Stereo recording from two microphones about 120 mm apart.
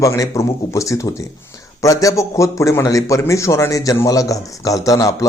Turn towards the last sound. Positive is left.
turn(degrees=25)  # may be behind; listen again after turning